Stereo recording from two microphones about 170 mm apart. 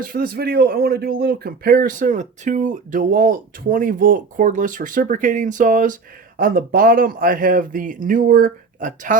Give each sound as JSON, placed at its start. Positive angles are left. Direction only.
{"t": 0.0, "sound": "a man's voice", "side_deg": -60}